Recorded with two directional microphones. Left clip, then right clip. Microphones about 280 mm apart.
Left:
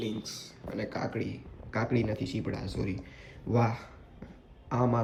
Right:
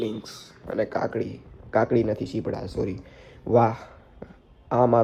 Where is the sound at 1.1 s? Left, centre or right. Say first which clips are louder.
Right 7 dB; centre.